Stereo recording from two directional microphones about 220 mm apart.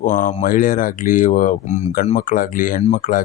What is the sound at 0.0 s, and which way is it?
Speech, 35° left (ahead or behind).